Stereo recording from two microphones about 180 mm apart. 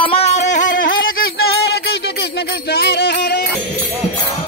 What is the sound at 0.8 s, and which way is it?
Music, 90° left.